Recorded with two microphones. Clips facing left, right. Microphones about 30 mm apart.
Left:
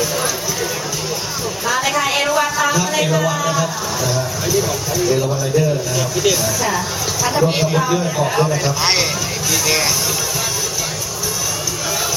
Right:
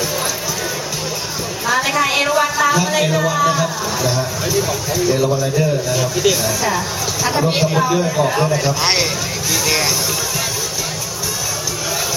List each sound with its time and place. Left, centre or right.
1.6 s a sound: centre
3.0 s speech: centre
3.3 s speech: right
6.0 s a man's voice: centre